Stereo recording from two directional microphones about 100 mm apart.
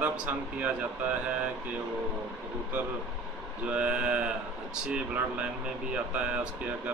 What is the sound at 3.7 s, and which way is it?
Speech, 10° right (ahead or behind).